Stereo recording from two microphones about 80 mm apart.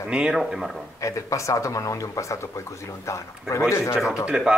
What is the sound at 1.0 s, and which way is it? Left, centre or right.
Speech, left.